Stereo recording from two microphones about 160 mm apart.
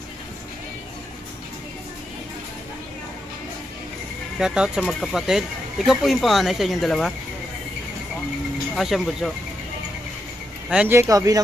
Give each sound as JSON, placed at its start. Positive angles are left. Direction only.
{"t": 4.4, "sound": "speech", "side_deg": -5}
{"t": 8.7, "sound": "speech", "side_deg": 0}
{"t": 10.7, "sound": "speech", "side_deg": -5}
{"t": 11.1, "sound": "speech", "side_deg": -20}